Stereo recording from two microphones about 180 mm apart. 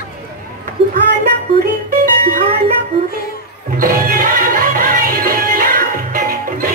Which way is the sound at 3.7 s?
50° right (ahead or behind).